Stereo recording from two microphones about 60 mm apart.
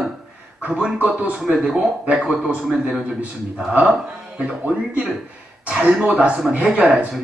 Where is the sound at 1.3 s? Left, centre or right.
Centre.